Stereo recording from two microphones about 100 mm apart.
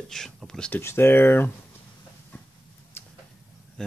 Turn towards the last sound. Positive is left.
turn(degrees=5)  # may be behind; listen again after turning